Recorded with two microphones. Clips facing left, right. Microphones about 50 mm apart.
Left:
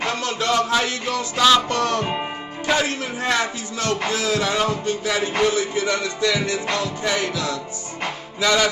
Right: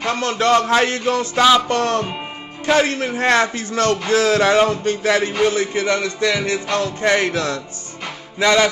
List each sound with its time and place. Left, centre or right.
0.0 s music: right
2.0 s music: left
2.6 s music: right
4.1 s a sound: right
5.5 s music: right